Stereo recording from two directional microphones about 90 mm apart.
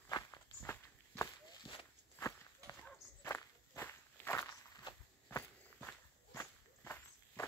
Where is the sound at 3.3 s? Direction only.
25° left (ahead or behind).